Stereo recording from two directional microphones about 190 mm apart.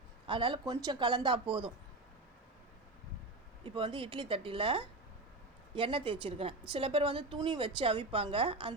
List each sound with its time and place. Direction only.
0.3 s a woman's voice: 25° right (ahead or behind)
3.6 s a woman's voice: 25° right (ahead or behind)